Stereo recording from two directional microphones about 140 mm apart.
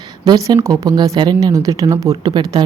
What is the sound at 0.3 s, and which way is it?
Speech, 25° right (ahead or behind).